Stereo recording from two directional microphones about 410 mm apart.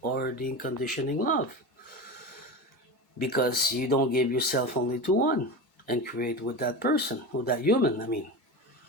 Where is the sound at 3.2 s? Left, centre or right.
Left.